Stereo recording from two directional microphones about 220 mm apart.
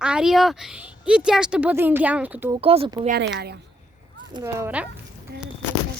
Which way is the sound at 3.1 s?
50° right (ahead or behind).